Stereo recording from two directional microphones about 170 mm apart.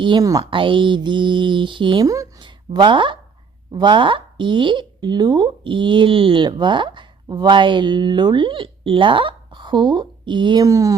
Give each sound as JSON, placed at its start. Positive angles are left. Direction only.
{"t": 0.0, "sound": "speech", "side_deg": -25}